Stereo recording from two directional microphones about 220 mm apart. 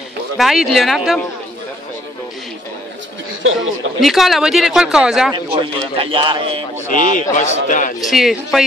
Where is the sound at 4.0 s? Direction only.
Centre (ahead or behind).